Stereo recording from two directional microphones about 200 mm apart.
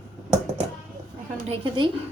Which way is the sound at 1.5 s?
25° right (ahead or behind).